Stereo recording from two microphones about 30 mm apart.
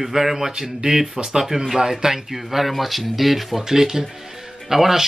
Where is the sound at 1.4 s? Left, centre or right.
Centre.